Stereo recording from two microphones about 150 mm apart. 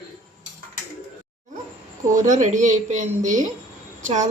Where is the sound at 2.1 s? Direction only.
55° right (ahead or behind).